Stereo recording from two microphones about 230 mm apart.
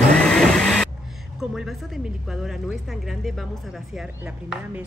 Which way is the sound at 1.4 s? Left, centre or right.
Centre.